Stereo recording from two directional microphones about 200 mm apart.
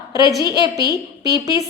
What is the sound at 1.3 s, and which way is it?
Speech, 15° right (ahead or behind).